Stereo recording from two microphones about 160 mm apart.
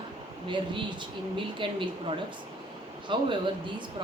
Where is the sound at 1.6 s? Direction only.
30° right (ahead or behind).